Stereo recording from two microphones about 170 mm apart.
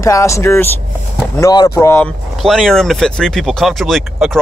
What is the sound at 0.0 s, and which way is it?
Speech, 15° left (ahead or behind).